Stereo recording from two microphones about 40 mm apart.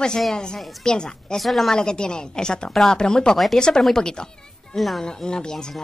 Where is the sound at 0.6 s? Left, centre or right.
Centre.